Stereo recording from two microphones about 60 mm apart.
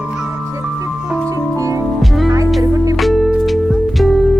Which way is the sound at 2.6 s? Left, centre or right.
Right.